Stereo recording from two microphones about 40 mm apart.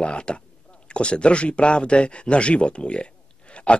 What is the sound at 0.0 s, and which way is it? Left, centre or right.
Speech, left.